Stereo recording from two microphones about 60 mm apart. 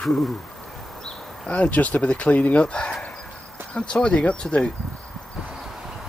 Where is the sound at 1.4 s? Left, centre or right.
Left.